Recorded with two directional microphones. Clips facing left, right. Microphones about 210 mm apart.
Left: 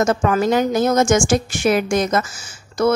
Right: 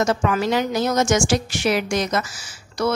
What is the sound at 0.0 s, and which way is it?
A woman's voice, 45° left (ahead or behind).